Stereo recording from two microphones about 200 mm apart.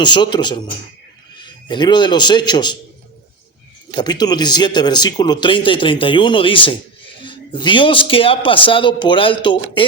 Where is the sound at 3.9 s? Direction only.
20° left (ahead or behind).